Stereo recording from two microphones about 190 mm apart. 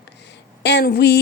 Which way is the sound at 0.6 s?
60° left (ahead or behind).